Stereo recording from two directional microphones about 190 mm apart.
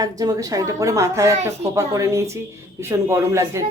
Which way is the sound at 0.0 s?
20° right (ahead or behind).